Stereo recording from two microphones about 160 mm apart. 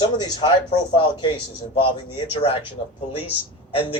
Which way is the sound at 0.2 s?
30° left (ahead or behind).